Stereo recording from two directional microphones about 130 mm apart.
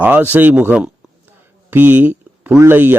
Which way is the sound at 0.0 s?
15° right (ahead or behind).